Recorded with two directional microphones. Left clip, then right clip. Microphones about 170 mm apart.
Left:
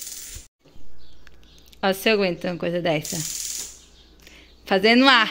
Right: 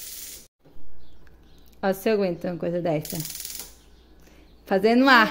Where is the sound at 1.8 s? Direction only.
5° right (ahead or behind).